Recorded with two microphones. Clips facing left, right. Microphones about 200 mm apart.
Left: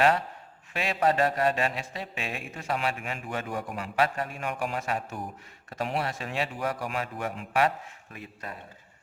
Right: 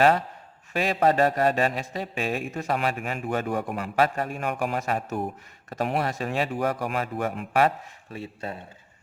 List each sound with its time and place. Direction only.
0.7 s a man's voice: 40° right (ahead or behind); by 3.8 s 60° right (ahead or behind)
3.9 s a man's voice: 45° right (ahead or behind)
8.1 s speech: 30° right (ahead or behind)